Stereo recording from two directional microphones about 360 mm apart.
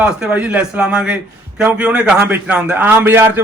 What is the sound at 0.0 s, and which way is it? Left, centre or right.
A man's voice, centre.